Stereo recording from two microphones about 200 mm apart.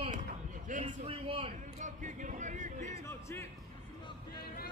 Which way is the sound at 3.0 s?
15° left (ahead or behind).